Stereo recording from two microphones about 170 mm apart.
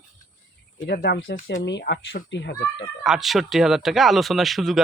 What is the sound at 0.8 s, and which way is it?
Speech, 70° left (ahead or behind).